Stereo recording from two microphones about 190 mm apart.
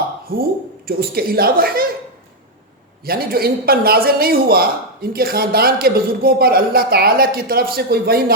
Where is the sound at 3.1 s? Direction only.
55° right (ahead or behind).